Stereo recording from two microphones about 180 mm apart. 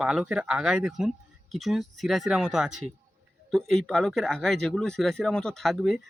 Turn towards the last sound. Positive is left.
turn(degrees=0)  # may be behind; listen again after turning